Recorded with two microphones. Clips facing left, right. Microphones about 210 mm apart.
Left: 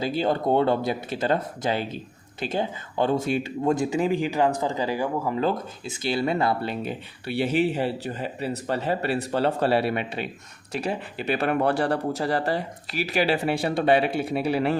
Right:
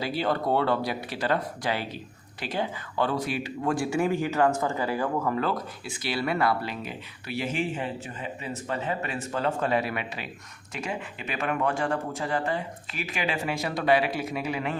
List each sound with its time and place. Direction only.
0.0 s speech: 20° left (ahead or behind)
5.4 s speech: 25° left (ahead or behind)